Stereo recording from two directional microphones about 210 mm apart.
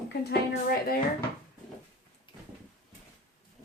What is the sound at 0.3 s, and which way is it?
Speech, 45° left (ahead or behind).